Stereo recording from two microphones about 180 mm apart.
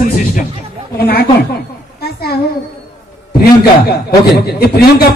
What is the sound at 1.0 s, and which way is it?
Speech, 60° left (ahead or behind).